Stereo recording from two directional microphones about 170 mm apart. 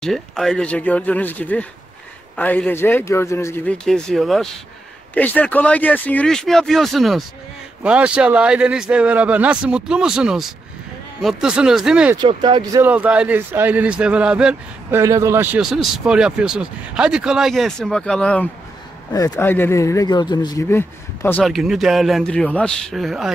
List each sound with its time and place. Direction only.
0.0 s speech: centre (ahead or behind)
12.2 s speech: 30° right (ahead or behind)
12.8 s speech: 10° right (ahead or behind)
15.0 s speech: 20° right (ahead or behind)
15.6 s speech: centre (ahead or behind)
21.5 s speech: centre (ahead or behind)